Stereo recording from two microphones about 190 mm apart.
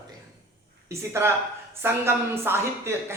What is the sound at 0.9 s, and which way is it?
Speech, 15° right (ahead or behind).